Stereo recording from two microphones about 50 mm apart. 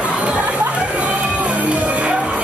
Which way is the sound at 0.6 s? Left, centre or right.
Right.